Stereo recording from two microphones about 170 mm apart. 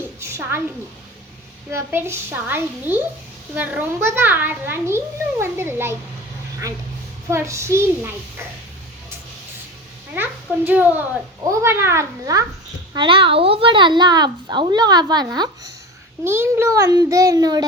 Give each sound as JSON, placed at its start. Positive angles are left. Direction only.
{"t": 0.2, "sound": "a sound", "side_deg": -15}
{"t": 1.7, "sound": "a child's voice", "side_deg": -15}
{"t": 7.3, "sound": "a child's voice", "side_deg": -15}
{"t": 10.2, "sound": "a child's voice", "side_deg": -10}